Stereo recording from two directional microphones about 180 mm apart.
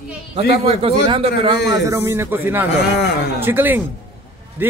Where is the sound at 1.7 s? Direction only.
20° right (ahead or behind).